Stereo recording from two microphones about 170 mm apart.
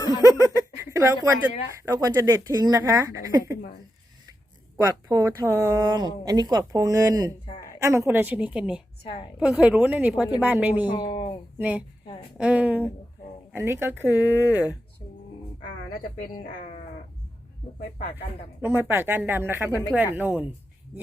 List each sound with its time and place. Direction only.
0.2 s a sound: 20° right (ahead or behind)
1.7 s speech: 15° right (ahead or behind)
5.0 s a woman's voice: 20° right (ahead or behind)
10.8 s speech: 25° left (ahead or behind)
11.5 s a woman's voice: 10° right (ahead or behind)
14.4 s speech: 20° left (ahead or behind)
18.6 s speech: 10° right (ahead or behind)